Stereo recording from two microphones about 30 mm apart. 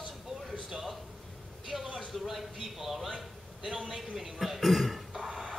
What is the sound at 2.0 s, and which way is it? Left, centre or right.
A man's voice, centre.